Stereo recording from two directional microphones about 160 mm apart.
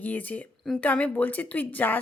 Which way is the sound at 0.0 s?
10° left (ahead or behind).